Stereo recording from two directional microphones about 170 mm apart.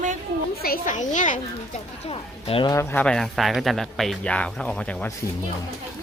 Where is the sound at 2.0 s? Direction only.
35° left (ahead or behind).